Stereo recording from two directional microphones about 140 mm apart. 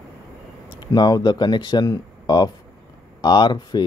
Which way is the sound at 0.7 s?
30° left (ahead or behind).